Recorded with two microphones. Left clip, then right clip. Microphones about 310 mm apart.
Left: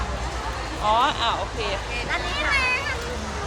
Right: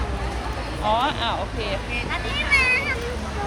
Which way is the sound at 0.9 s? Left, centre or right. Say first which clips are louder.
Left 1 dB; centre.